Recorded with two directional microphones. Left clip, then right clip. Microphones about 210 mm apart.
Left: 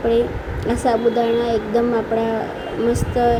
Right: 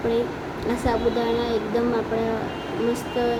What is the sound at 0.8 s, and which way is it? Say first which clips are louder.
Speech: left 6 dB; 20° left (ahead or behind).